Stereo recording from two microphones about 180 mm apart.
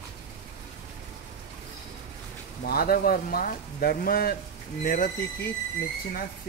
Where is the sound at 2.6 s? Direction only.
55° left (ahead or behind).